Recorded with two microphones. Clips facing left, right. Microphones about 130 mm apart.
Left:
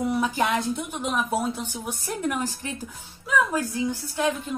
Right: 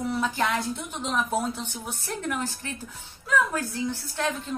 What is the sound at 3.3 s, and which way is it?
Speech, 5° left (ahead or behind).